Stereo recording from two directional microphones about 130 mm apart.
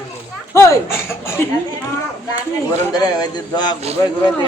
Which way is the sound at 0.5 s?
25° left (ahead or behind).